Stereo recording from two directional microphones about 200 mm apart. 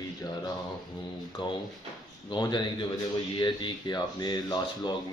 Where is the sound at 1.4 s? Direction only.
25° left (ahead or behind).